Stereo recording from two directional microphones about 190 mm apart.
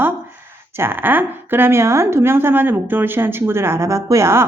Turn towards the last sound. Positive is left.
turn(degrees=-15)  # may be behind; listen again after turning